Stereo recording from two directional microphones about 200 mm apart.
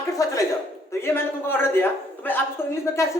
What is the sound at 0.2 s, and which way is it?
A man's voice, 15° left (ahead or behind).